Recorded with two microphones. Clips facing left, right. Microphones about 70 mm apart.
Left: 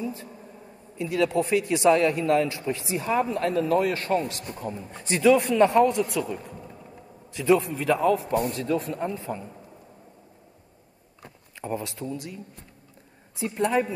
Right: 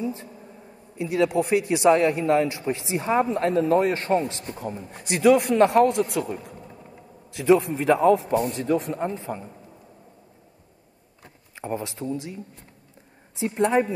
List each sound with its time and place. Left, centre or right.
0.0 s a sound: right
0.9 s a man's voice: right
4.5 s a man's voice: right
5.9 s a man's voice: right
7.3 s a man's voice: right
11.6 s a man's voice: right
13.4 s a man's voice: right